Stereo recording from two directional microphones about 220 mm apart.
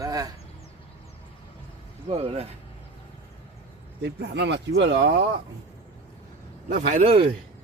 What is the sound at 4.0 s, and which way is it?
Speech, 50° right (ahead or behind).